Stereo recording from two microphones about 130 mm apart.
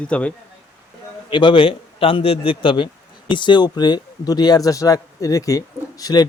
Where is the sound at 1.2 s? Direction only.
40° left (ahead or behind).